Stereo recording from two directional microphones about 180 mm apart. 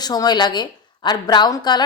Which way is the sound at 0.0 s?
20° left (ahead or behind).